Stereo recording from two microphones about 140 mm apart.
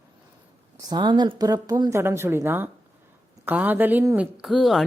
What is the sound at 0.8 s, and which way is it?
A woman's voice, 30° right (ahead or behind).